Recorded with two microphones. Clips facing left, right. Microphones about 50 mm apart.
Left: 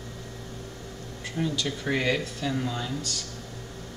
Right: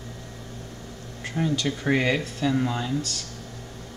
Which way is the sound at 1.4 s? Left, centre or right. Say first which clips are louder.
Right 3 dB; right.